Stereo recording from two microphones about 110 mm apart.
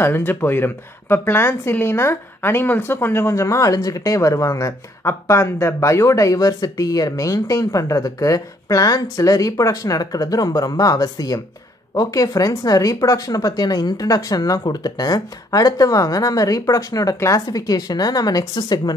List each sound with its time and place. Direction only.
0.0 s speech: 20° left (ahead or behind); by 18.9 s 35° left (ahead or behind)